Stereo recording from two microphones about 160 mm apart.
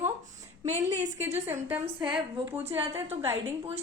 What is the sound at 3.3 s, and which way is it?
Speech, 40° right (ahead or behind).